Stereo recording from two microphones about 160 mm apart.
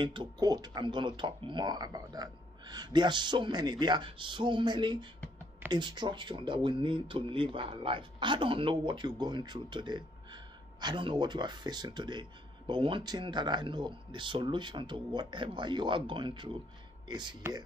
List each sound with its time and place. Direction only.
0.0 s speech: 30° right (ahead or behind)